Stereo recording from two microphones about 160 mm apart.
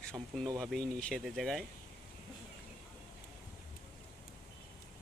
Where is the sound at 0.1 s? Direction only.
25° right (ahead or behind).